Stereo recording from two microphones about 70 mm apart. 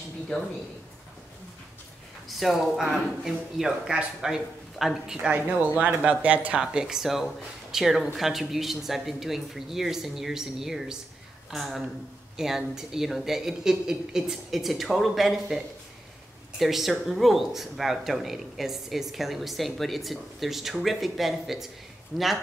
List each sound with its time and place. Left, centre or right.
2.2 s speech: centre
5.3 s speech: right
6.6 s speech: centre